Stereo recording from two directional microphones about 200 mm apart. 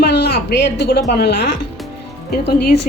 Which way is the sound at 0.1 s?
55° left (ahead or behind).